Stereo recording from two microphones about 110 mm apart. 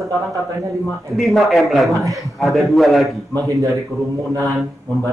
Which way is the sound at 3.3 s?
30° right (ahead or behind).